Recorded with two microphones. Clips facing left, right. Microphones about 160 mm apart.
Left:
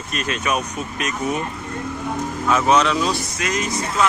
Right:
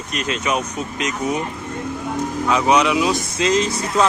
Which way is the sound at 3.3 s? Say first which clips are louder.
Right 5 dB; 25° right (ahead or behind).